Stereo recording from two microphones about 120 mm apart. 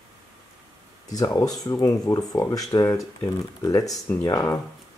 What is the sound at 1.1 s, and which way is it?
Speech, 30° left (ahead or behind).